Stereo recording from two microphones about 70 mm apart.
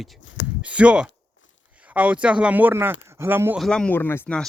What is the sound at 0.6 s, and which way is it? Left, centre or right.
Speech, centre.